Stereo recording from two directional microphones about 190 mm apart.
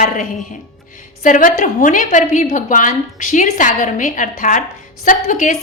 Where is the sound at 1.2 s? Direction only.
45° left (ahead or behind).